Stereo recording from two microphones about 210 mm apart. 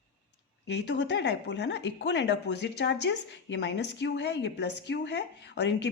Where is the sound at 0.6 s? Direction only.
55° left (ahead or behind).